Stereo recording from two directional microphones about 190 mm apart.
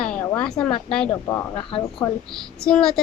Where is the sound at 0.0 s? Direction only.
5° left (ahead or behind).